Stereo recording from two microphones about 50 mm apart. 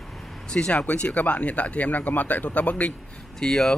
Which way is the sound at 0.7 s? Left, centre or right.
Left.